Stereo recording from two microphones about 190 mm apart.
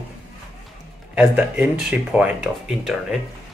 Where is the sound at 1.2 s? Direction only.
10° right (ahead or behind).